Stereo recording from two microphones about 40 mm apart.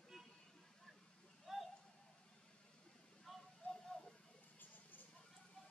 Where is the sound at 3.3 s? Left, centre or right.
Centre.